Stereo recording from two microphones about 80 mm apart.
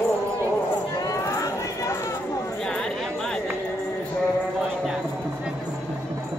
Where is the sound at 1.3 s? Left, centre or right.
Left.